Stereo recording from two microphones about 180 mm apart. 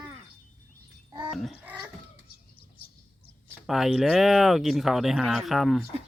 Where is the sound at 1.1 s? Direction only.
25° right (ahead or behind).